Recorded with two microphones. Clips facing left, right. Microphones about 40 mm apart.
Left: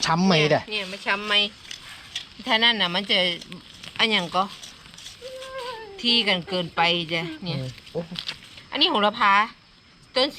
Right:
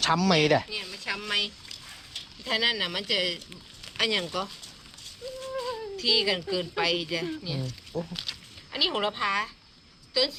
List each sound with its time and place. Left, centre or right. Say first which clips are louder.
0.1 s speech: left 4 dB; centre
0.7 s speech: left 8 dB; left
3.8 s a sound: left 5 dB; left
4.3 s speech: left 8 dB; left
5.5 s speech: right 2 dB; left
8.7 s speech: left 7 dB; left